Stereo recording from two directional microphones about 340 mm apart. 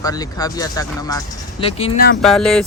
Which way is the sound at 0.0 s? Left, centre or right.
Centre.